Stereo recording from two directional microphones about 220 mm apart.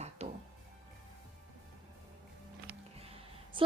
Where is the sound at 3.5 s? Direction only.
20° right (ahead or behind).